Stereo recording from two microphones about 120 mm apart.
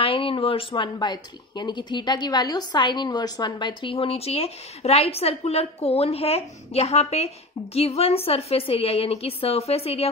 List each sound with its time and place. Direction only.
0.0 s speech: 50° left (ahead or behind)